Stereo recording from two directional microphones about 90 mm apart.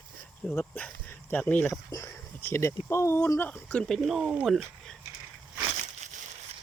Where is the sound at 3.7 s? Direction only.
5° left (ahead or behind).